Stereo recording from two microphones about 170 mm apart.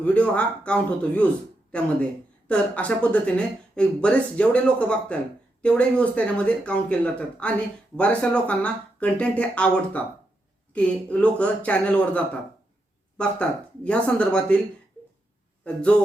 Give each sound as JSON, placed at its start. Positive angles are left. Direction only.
{"t": 0.0, "sound": "speech", "side_deg": 5}
{"t": 15.6, "sound": "speech", "side_deg": 5}